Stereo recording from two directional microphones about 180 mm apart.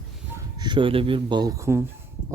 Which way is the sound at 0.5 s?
25° right (ahead or behind).